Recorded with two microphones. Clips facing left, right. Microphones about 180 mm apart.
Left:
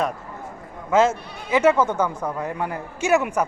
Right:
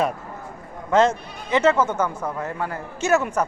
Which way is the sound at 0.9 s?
5° left (ahead or behind).